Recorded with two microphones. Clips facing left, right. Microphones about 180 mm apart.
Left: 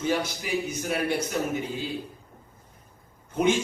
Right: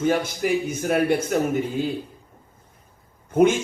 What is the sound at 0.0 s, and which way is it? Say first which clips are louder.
A man's voice: right 6 dB; 50° right (ahead or behind).